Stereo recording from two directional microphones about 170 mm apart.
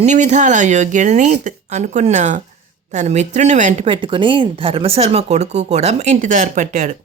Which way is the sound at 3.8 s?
30° right (ahead or behind).